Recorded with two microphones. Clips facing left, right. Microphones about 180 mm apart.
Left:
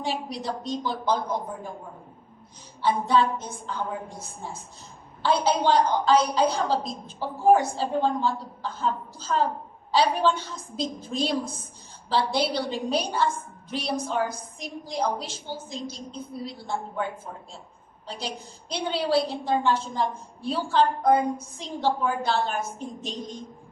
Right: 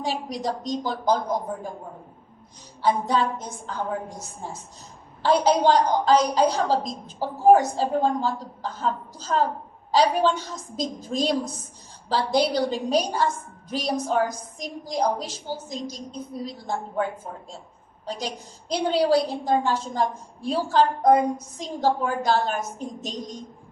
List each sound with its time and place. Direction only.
0.0 s a woman's voice: 40° right (ahead or behind)
2.8 s a woman's voice: 40° right (ahead or behind)
5.2 s a woman's voice: 40° right (ahead or behind)